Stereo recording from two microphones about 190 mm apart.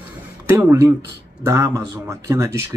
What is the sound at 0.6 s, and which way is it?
Speech, 10° right (ahead or behind).